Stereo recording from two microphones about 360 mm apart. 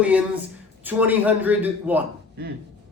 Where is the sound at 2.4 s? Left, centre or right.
Right.